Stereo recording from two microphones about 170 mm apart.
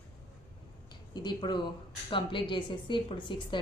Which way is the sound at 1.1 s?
25° left (ahead or behind).